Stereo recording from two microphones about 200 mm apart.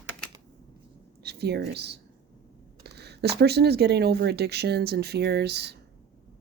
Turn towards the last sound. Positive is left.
turn(degrees=-55)  # may be behind; listen again after turning